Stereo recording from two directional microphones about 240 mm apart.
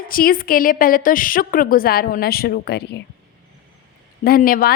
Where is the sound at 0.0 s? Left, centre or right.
Left.